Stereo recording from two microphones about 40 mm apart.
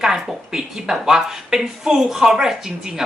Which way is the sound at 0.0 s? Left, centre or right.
Centre.